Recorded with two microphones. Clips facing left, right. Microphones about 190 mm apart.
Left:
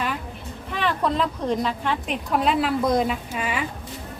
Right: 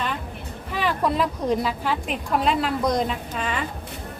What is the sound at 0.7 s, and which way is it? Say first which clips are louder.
A woman's voice: even; 5° right (ahead or behind).